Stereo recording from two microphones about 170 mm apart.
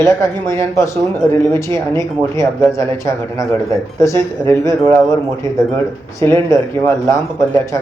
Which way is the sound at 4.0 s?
15° left (ahead or behind).